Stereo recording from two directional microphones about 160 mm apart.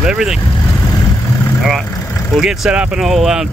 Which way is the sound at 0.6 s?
20° left (ahead or behind).